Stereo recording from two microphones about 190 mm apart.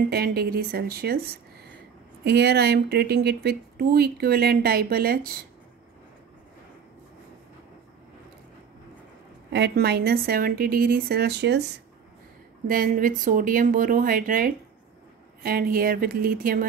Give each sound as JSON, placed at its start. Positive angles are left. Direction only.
{"t": 0.1, "sound": "speech", "side_deg": -55}
{"t": 9.5, "sound": "speech", "side_deg": -60}
{"t": 12.6, "sound": "speech", "side_deg": -45}